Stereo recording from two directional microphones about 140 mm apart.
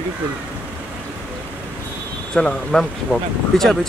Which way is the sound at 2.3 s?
5° left (ahead or behind).